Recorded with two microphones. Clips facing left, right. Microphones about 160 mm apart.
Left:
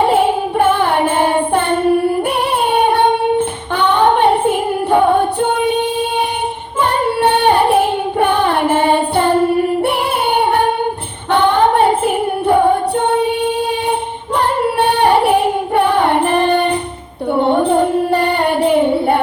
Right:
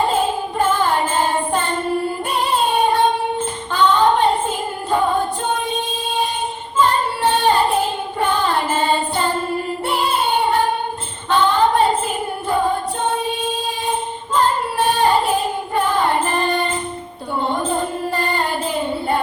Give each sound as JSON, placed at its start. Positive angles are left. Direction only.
{"t": 0.0, "sound": "music", "side_deg": 65}
{"t": 6.7, "sound": "child singing", "side_deg": 65}
{"t": 11.3, "sound": "singing", "side_deg": 65}
{"t": 17.3, "sound": "child singing", "side_deg": 65}